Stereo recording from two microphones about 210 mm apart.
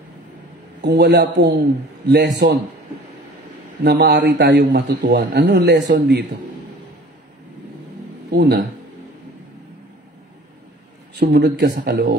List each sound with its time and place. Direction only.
0.8 s a man's voice: 55° right (ahead or behind)
3.8 s a man's voice: 50° right (ahead or behind)
8.3 s a man's voice: 50° right (ahead or behind)
11.1 s a man's voice: 50° right (ahead or behind)